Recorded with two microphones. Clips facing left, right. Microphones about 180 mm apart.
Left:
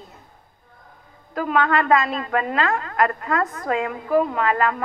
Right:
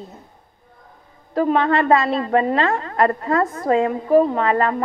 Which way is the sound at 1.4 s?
30° right (ahead or behind).